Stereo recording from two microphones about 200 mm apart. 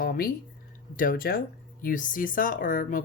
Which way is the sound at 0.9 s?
45° left (ahead or behind).